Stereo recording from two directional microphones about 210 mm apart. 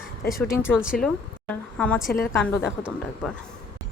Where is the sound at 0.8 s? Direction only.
Centre (ahead or behind).